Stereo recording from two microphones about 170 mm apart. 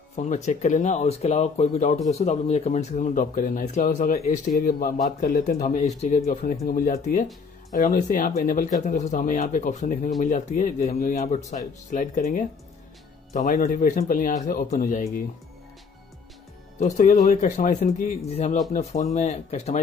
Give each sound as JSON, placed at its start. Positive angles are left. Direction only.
{"t": 0.1, "sound": "speech", "side_deg": 45}
{"t": 4.6, "sound": "speech", "side_deg": 60}
{"t": 16.8, "sound": "speech", "side_deg": 45}